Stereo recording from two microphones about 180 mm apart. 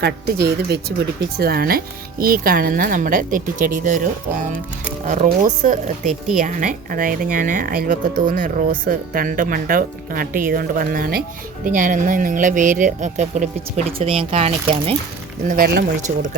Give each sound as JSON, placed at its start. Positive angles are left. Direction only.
{"t": 0.0, "sound": "speech", "side_deg": -65}
{"t": 5.0, "sound": "speech", "side_deg": -45}
{"t": 15.4, "sound": "speech", "side_deg": -55}